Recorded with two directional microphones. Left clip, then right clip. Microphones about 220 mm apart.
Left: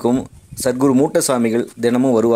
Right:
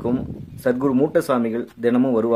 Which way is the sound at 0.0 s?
30° left (ahead or behind).